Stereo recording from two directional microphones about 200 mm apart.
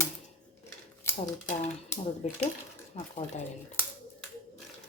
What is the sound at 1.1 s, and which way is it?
Typewriter, 10° left (ahead or behind).